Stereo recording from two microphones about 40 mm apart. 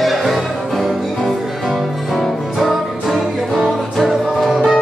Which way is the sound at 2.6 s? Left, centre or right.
Centre.